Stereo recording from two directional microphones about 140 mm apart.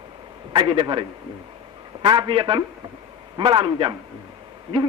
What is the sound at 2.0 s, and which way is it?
A man's voice, 35° right (ahead or behind).